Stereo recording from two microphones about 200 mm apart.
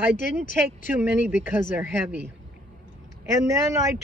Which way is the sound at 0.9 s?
10° right (ahead or behind).